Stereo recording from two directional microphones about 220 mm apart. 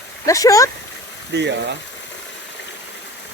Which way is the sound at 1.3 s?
50° right (ahead or behind).